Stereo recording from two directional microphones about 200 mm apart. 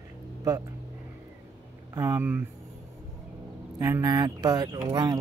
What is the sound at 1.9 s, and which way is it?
Speech, 15° right (ahead or behind).